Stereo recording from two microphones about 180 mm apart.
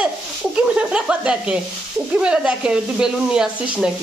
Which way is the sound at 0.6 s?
5° right (ahead or behind).